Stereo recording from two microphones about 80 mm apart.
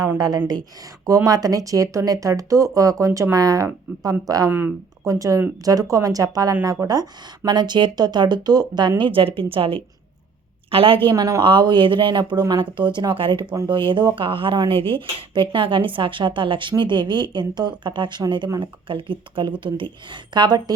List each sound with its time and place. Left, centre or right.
0.2 s speech: right
9.0 s speech: right
10.8 s speech: right
11.1 s speech: right
11.3 s speech: right
12.4 s speech: right
18.6 s speech: right